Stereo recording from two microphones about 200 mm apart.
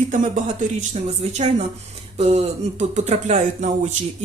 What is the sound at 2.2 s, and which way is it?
Speech, 30° right (ahead or behind).